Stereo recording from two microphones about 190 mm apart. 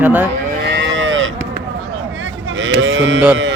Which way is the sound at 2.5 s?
75° right (ahead or behind).